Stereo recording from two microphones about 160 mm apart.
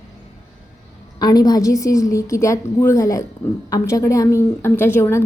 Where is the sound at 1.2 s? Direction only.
25° left (ahead or behind).